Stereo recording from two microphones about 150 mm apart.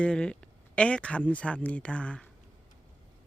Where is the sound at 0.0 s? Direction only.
5° left (ahead or behind).